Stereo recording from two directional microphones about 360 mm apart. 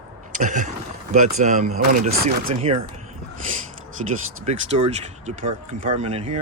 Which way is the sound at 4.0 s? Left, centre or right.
Centre.